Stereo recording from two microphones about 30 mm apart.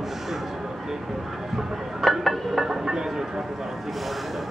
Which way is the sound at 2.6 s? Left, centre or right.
Centre.